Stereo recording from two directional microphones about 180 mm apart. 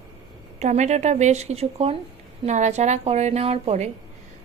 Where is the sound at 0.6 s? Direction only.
40° right (ahead or behind).